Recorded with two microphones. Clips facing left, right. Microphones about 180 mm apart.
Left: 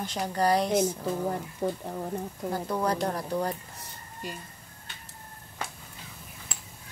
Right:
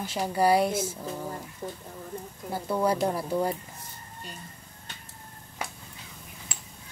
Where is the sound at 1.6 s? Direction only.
75° left (ahead or behind).